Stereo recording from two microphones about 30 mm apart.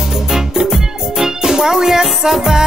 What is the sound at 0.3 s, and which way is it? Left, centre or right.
Music, centre.